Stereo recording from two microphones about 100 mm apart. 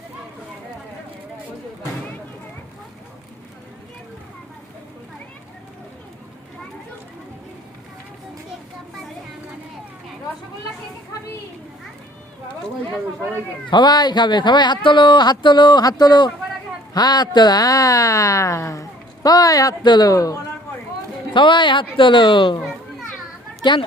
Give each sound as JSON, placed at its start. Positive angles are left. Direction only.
{"t": 13.7, "sound": "speech", "side_deg": 45}
{"t": 21.3, "sound": "speech", "side_deg": 55}